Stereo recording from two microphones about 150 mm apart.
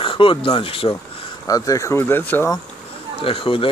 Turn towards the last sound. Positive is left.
turn(degrees=35)  # may be behind; listen again after turning